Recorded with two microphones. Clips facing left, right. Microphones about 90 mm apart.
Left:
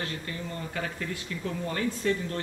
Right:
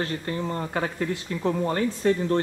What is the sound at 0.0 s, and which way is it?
Speech, 40° right (ahead or behind).